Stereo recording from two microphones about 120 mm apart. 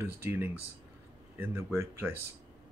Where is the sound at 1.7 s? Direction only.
20° right (ahead or behind).